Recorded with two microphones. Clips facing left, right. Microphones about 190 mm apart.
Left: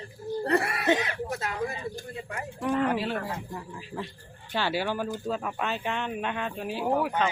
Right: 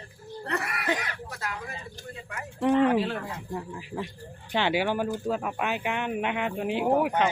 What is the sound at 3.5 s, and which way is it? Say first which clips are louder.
Speech: right 3 dB; 15° right (ahead or behind).